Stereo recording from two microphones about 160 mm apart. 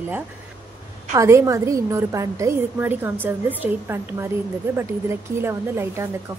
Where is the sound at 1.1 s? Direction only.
20° right (ahead or behind).